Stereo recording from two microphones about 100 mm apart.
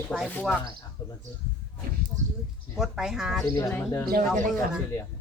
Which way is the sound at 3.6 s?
25° left (ahead or behind).